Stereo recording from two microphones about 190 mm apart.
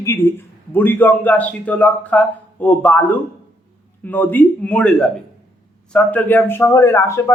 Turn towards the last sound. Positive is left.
turn(degrees=15)  # may be behind; listen again after turning